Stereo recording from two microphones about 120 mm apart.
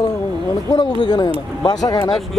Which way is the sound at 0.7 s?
35° left (ahead or behind).